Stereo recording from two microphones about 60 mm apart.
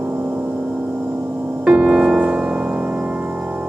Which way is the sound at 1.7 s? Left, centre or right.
Centre.